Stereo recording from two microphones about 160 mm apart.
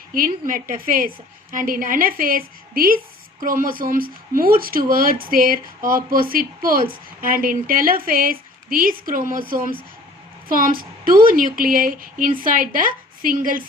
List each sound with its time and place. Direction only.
0.1 s speech: 60° right (ahead or behind)